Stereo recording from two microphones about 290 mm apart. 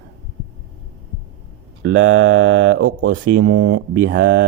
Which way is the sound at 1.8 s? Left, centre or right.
Right.